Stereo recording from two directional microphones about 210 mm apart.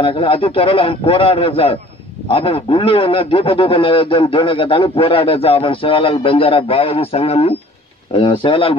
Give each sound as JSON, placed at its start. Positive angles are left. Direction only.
{"t": 0.0, "sound": "a man's voice", "side_deg": 25}